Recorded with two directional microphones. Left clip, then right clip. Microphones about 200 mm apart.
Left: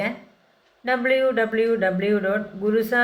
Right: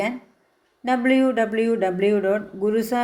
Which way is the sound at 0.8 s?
40° right (ahead or behind).